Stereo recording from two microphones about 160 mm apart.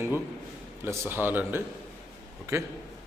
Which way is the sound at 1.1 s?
10° right (ahead or behind).